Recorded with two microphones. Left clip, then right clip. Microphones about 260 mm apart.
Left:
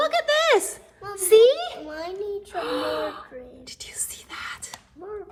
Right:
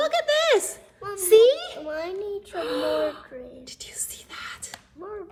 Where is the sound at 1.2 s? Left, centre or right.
Centre.